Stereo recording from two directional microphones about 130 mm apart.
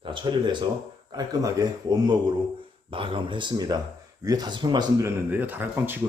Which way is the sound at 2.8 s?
40° right (ahead or behind).